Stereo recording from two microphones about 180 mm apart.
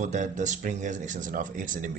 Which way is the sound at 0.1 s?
40° right (ahead or behind).